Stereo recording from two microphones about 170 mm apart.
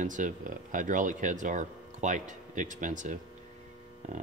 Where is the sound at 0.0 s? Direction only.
50° right (ahead or behind).